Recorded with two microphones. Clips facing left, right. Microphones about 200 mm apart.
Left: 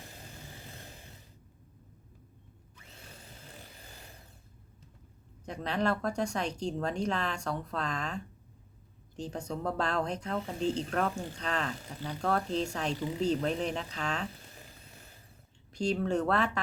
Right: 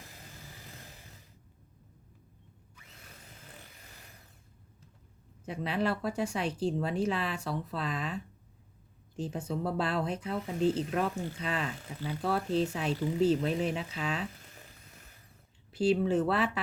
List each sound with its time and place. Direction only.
0.0 s vehicle: 30° left (ahead or behind)
2.9 s tools: 30° left (ahead or behind)
3.8 s a sound: 30° left (ahead or behind)
5.5 s speech: 5° right (ahead or behind)
14.4 s a sound: 30° left (ahead or behind)
15.7 s speech: 5° right (ahead or behind)